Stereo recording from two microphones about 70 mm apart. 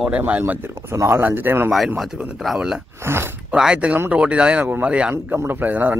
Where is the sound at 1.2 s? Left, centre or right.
Right.